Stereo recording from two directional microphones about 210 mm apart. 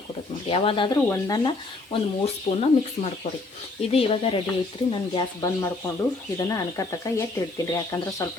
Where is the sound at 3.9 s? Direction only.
25° left (ahead or behind).